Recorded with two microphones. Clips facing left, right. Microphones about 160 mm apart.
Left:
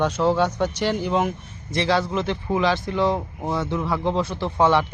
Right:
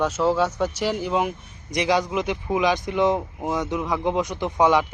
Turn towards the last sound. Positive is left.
turn(degrees=-10)  # may be behind; listen again after turning